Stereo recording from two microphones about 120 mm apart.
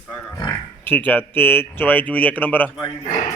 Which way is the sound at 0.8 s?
15° left (ahead or behind).